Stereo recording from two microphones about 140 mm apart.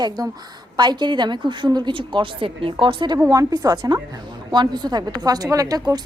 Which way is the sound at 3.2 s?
25° right (ahead or behind).